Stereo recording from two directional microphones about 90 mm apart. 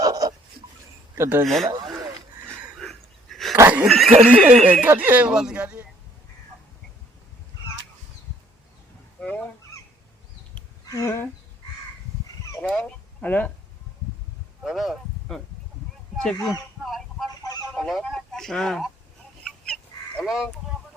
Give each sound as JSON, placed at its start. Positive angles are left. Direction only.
{"t": 0.0, "sound": "a sound", "side_deg": -40}
{"t": 1.1, "sound": "speech", "side_deg": -30}
{"t": 1.5, "sound": "a sound", "side_deg": 0}
{"t": 2.7, "sound": "a sound", "side_deg": 5}
{"t": 4.3, "sound": "speech", "side_deg": -15}
{"t": 9.2, "sound": "speech", "side_deg": 15}
{"t": 10.8, "sound": "speech", "side_deg": 35}
{"t": 12.6, "sound": "speech", "side_deg": 10}
{"t": 14.6, "sound": "speech", "side_deg": -5}
{"t": 17.2, "sound": "fowl", "side_deg": 45}
{"t": 17.7, "sound": "speech", "side_deg": 0}
{"t": 19.5, "sound": "fowl", "side_deg": 5}